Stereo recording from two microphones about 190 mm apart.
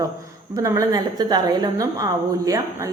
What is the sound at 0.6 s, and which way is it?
A woman's voice, 15° right (ahead or behind).